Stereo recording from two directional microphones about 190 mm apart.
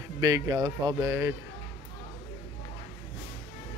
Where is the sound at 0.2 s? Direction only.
20° right (ahead or behind).